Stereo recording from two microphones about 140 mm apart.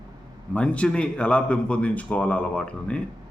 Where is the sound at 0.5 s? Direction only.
10° left (ahead or behind).